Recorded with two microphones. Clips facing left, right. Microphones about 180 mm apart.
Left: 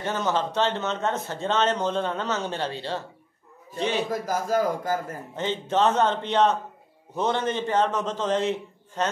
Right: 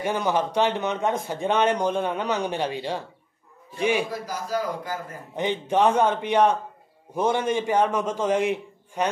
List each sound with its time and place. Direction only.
0.0 s a man's voice: 10° right (ahead or behind)
4.1 s a man's voice: 50° left (ahead or behind)
5.3 s a man's voice: 15° right (ahead or behind)